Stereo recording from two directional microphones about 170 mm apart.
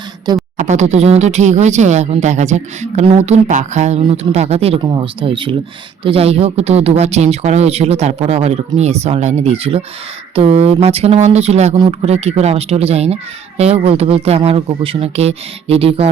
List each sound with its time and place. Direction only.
0.5 s speech: 45° right (ahead or behind)